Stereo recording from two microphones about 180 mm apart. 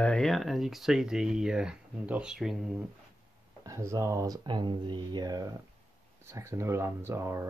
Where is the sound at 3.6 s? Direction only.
15° right (ahead or behind).